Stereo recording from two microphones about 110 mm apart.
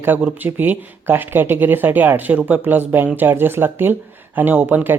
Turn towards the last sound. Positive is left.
turn(degrees=-20)  # may be behind; listen again after turning